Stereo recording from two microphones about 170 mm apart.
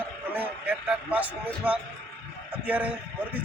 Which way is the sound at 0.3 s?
10° right (ahead or behind).